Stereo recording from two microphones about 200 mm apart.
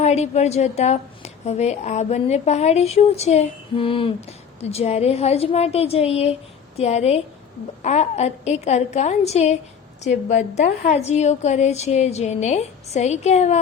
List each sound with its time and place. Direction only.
0.0 s a woman's voice: 35° left (ahead or behind)